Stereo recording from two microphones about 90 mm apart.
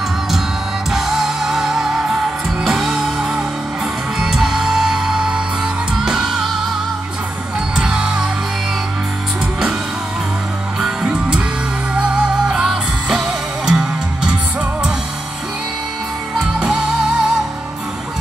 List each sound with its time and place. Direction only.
0.9 s music: 5° right (ahead or behind)
7.7 s music: 10° right (ahead or behind)
10.8 s music: 5° right (ahead or behind)
16.3 s music: 5° right (ahead or behind)